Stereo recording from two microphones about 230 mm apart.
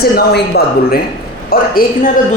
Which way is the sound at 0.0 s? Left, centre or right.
Left.